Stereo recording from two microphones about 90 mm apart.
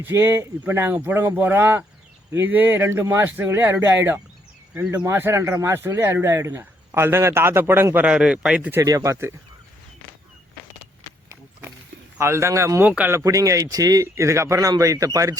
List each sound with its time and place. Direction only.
0.0 s speech: 25° right (ahead or behind)
8.0 s speech: 10° right (ahead or behind)
8.8 s speech: 40° right (ahead or behind)
12.2 s speech: 30° right (ahead or behind)